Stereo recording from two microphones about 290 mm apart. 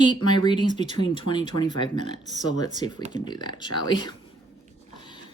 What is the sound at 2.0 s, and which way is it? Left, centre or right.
Speech, right.